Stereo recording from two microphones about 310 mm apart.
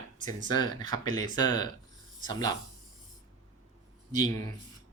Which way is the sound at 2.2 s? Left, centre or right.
Centre.